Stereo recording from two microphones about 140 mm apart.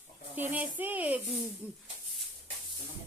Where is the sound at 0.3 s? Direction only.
10° right (ahead or behind).